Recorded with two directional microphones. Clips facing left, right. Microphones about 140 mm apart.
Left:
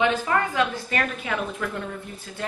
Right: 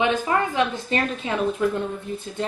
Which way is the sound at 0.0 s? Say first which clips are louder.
Right 1 dB; 20° right (ahead or behind).